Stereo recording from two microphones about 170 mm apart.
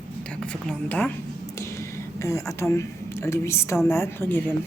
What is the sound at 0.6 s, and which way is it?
Speech, 10° left (ahead or behind).